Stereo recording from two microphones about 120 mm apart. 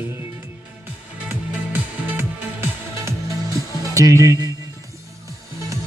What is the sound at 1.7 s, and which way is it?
Music, 20° right (ahead or behind).